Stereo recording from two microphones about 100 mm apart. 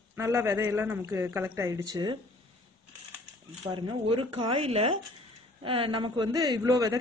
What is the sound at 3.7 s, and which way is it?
Speech, 50° right (ahead or behind).